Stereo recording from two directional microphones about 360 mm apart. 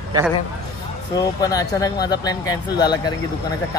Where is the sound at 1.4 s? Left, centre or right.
Centre.